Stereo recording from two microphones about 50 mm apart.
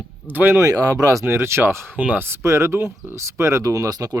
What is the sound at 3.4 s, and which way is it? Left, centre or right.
Speech, right.